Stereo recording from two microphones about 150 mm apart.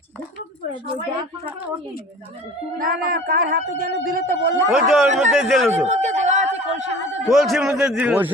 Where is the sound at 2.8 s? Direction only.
70° right (ahead or behind).